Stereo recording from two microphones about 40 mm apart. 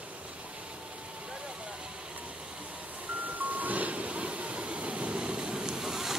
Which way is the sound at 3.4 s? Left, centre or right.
Right.